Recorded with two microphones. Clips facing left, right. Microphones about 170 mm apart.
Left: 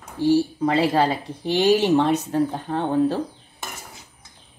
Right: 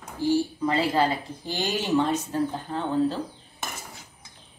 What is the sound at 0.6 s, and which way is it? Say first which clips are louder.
Speech: left 4 dB; 70° left (ahead or behind).